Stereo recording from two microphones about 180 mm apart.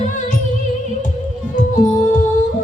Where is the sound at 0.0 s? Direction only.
45° left (ahead or behind).